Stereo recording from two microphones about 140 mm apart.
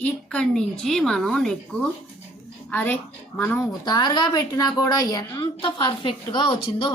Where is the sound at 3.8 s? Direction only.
30° left (ahead or behind).